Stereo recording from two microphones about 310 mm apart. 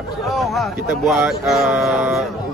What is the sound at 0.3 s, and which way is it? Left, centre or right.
Speech, centre.